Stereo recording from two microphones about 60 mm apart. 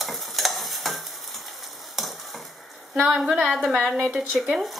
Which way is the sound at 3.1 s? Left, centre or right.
Centre.